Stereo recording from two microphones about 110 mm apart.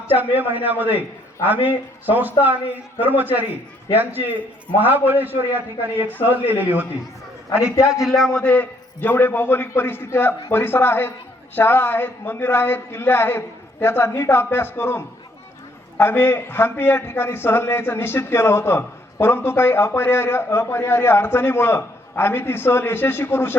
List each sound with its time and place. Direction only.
0.3 s a man's voice: 15° right (ahead or behind)
7.9 s a man's voice: 5° right (ahead or behind); by 23.6 s 20° left (ahead or behind)